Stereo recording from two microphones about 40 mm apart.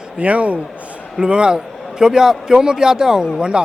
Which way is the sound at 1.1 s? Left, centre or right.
Centre.